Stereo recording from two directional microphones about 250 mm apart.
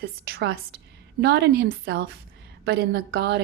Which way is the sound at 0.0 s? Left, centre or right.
Right.